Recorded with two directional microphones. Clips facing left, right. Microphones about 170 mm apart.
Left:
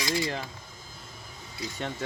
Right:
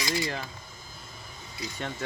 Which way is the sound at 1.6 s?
25° left (ahead or behind).